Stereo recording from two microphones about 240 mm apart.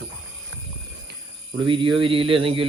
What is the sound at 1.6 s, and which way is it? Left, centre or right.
Speech, centre.